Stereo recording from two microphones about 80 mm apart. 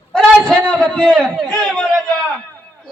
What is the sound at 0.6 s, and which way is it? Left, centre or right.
A man's voice, centre.